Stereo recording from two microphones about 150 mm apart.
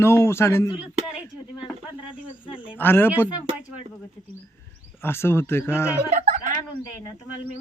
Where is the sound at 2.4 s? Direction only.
35° left (ahead or behind).